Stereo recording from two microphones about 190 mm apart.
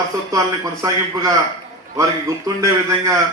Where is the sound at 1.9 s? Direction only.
15° right (ahead or behind).